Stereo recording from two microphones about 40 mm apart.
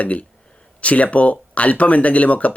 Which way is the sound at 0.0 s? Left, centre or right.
Left.